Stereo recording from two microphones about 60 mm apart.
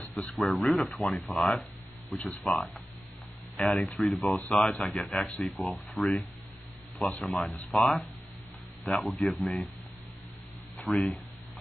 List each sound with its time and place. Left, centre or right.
0.2 s speech: centre
2.0 s speech: left
2.4 s speech: centre
10.8 s speech: centre